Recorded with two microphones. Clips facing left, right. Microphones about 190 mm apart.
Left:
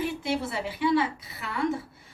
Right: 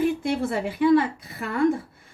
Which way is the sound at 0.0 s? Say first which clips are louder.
Right 6 dB; 50° right (ahead or behind).